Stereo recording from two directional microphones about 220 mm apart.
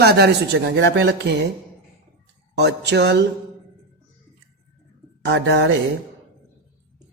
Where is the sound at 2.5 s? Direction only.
50° right (ahead or behind).